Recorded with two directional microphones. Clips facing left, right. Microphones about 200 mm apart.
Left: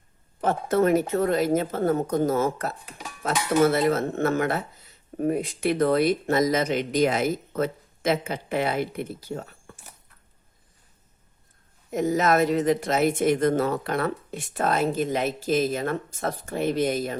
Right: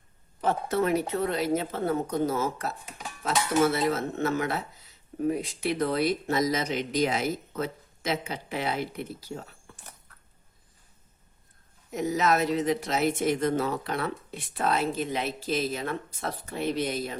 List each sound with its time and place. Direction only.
0.4 s a woman's voice: 50° left (ahead or behind)
11.9 s a woman's voice: 50° left (ahead or behind)